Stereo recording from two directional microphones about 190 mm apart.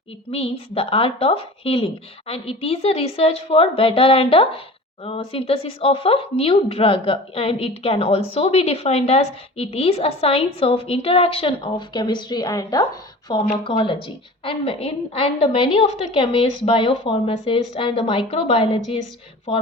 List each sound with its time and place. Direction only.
0.3 s a woman's voice: 30° left (ahead or behind)